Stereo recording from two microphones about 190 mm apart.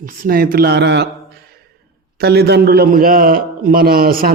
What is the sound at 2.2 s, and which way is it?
A man's voice, 60° right (ahead or behind).